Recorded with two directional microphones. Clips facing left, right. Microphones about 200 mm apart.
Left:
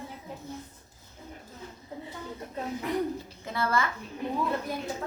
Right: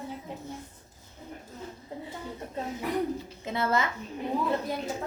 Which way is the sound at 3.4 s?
20° right (ahead or behind).